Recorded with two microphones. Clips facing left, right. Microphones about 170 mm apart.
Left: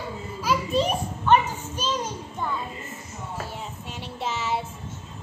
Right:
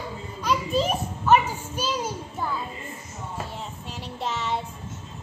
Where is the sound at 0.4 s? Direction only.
Centre (ahead or behind).